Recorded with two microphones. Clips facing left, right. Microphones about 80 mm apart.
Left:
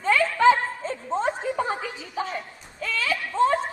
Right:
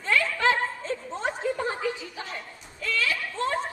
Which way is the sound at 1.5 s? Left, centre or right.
Left.